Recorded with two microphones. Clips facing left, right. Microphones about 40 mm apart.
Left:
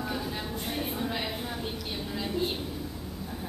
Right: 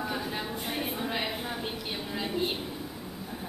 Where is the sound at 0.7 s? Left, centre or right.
Centre.